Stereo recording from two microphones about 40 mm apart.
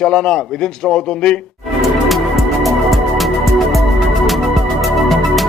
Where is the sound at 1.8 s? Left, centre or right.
Centre.